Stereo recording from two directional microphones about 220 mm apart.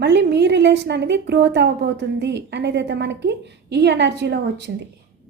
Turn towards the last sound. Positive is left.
turn(degrees=-50)  # may be behind; listen again after turning